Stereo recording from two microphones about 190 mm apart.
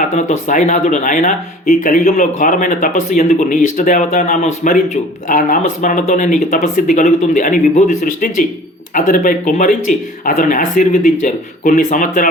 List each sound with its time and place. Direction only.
0.0 s speech: 40° left (ahead or behind)